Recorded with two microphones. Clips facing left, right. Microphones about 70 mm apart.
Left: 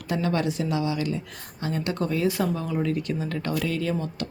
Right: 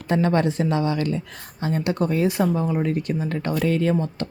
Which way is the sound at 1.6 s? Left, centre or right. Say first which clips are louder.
Right 4 dB; right.